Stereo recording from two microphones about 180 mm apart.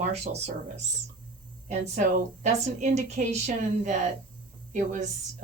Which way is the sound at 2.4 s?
40° right (ahead or behind).